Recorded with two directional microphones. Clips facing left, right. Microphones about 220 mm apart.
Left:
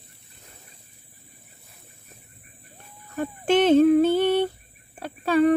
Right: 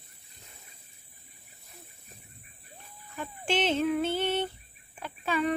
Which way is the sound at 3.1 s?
50° left (ahead or behind).